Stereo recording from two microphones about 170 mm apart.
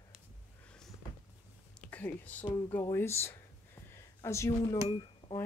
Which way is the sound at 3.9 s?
15° left (ahead or behind).